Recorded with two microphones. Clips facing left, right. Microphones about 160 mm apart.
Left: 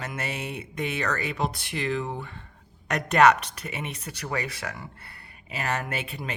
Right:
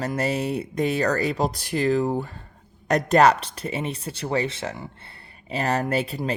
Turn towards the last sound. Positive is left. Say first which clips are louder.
# right 9 dB
turn(degrees=-35)  # may be behind; listen again after turning